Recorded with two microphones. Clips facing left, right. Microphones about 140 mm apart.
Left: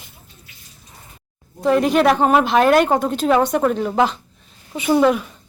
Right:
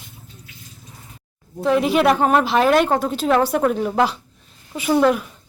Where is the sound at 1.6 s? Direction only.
Centre (ahead or behind).